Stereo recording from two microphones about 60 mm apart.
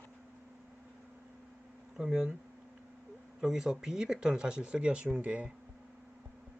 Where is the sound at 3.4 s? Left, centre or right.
Centre.